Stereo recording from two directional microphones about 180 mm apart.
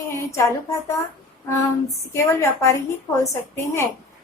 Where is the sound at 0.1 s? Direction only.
15° left (ahead or behind).